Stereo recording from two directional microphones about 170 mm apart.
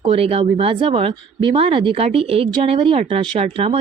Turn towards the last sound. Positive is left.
turn(degrees=-35)  # may be behind; listen again after turning